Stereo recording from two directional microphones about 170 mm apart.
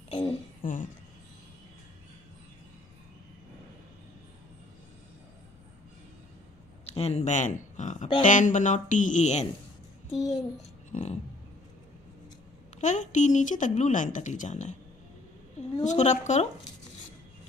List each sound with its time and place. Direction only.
0.1 s speech: 30° left (ahead or behind)
0.6 s speech: 50° left (ahead or behind)
6.9 s a child's voice: 40° left (ahead or behind)
10.9 s a sound: 40° left (ahead or behind)
12.8 s speech: 45° left (ahead or behind)
15.8 s speech: 45° left (ahead or behind)